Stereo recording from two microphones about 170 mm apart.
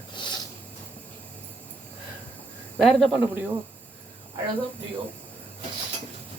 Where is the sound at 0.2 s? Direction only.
25° left (ahead or behind).